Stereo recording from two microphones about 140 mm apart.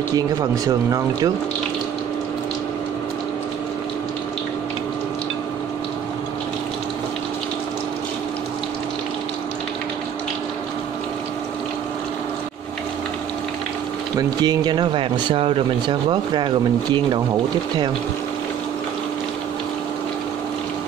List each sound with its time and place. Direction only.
0.1 s speech: 25° right (ahead or behind)
14.1 s speech: 30° right (ahead or behind)